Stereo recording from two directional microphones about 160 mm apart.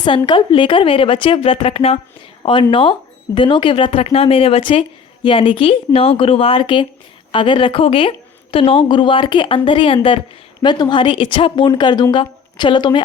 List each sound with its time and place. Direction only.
0.3 s a woman's voice: 30° left (ahead or behind)